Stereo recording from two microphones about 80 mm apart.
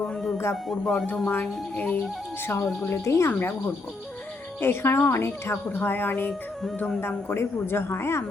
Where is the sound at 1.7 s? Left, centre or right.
Left.